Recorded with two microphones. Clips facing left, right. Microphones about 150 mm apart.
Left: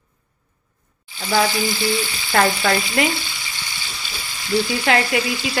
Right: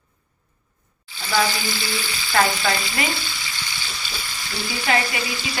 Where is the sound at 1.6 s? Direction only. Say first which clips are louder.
Left 7 dB; 20° left (ahead or behind).